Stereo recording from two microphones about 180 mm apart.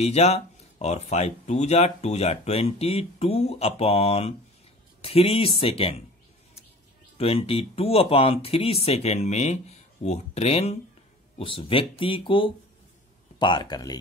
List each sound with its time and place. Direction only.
0.0 s speech: 35° left (ahead or behind)
7.2 s speech: 35° left (ahead or behind)